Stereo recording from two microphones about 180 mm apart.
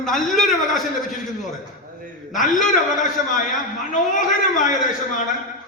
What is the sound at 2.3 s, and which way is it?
Speech, 45° left (ahead or behind).